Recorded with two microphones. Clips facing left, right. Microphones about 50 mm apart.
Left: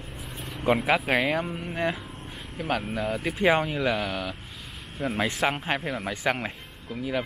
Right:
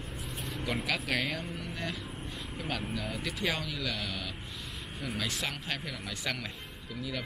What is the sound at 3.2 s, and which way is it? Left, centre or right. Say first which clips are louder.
Speech: left 13 dB; left.